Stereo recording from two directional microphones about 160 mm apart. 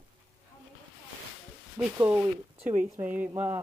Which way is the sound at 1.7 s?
10° right (ahead or behind).